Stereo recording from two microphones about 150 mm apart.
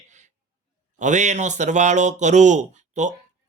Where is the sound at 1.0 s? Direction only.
50° right (ahead or behind).